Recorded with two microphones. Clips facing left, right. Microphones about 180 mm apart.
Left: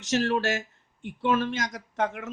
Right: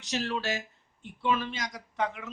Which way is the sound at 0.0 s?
50° left (ahead or behind).